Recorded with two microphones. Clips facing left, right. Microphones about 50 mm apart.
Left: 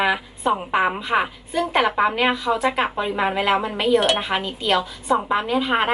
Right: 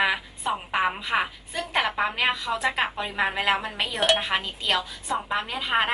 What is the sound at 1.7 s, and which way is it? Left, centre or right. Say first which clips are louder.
A woman's voice: left 5 dB; left.